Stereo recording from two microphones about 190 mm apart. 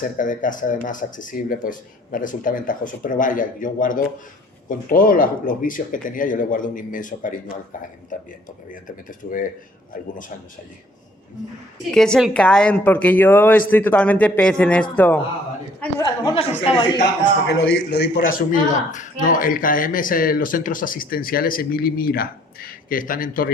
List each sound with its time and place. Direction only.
0.0 s speech: 45° left (ahead or behind)
11.9 s a woman's voice: 5° left (ahead or behind); by 17.0 s 25° left (ahead or behind)
17.4 s a man's voice: 65° left (ahead or behind)
18.3 s speech: 45° left (ahead or behind)